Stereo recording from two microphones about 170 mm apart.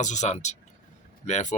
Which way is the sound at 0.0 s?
45° left (ahead or behind).